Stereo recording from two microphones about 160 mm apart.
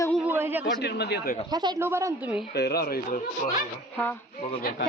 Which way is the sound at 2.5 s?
90° left.